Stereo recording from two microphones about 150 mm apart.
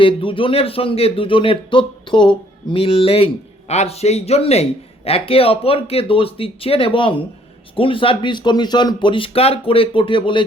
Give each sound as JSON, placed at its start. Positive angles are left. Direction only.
{"t": 0.0, "sound": "speech", "side_deg": 35}